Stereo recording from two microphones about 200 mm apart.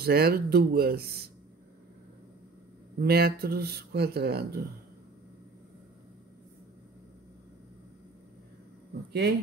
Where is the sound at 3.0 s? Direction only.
50° right (ahead or behind).